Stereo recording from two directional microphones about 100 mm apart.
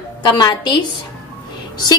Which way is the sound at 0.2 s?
50° left (ahead or behind).